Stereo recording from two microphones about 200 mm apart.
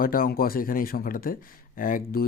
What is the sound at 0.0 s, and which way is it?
Speech, 45° left (ahead or behind).